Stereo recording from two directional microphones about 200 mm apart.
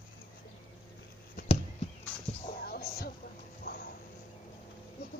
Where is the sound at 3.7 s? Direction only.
50° left (ahead or behind).